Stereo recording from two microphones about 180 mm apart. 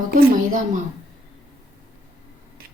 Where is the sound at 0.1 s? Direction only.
50° right (ahead or behind).